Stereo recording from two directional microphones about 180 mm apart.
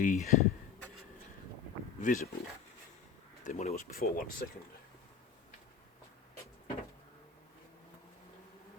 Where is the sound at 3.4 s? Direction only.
40° left (ahead or behind).